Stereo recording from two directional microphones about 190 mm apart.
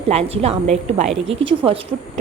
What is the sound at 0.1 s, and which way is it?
A woman's voice, 35° right (ahead or behind).